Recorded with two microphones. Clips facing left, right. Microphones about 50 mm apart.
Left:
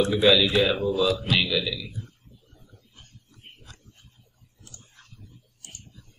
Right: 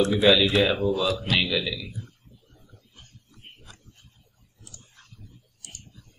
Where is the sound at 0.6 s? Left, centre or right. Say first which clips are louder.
Even; centre.